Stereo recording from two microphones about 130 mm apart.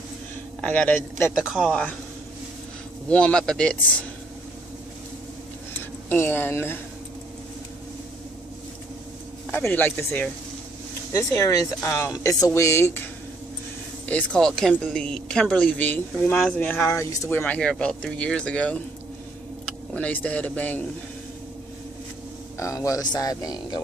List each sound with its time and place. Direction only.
0.6 s speech: 10° left (ahead or behind)
1.3 s speech: 5° right (ahead or behind)
1.7 s speech: 10° left (ahead or behind)
3.1 s speech: 5° left (ahead or behind)
5.7 s a sound: 15° left (ahead or behind)
9.5 s speech: 15° left (ahead or behind)
11.1 s speech: 25° left (ahead or behind)
14.0 s speech: 10° left (ahead or behind)
22.6 s speech: 25° left (ahead or behind)